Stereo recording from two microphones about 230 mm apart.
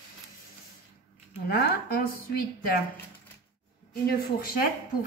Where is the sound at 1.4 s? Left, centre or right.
Left.